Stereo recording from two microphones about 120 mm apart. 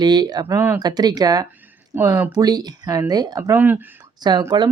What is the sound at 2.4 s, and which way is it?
Speech, 30° right (ahead or behind).